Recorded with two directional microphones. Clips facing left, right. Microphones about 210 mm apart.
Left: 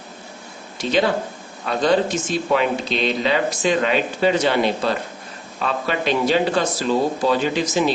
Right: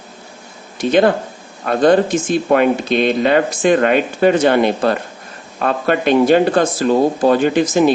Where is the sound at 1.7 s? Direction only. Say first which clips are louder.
Right 6 dB; 50° right (ahead or behind).